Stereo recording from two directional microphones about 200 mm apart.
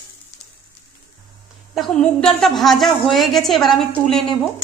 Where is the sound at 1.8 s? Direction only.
5° left (ahead or behind).